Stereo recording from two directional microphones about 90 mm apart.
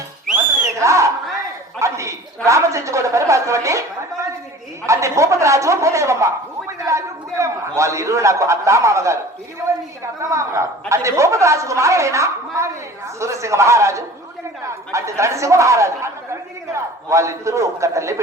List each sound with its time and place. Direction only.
0.8 s a woman's voice: 35° right (ahead or behind)
4.9 s a woman's voice: 35° right (ahead or behind)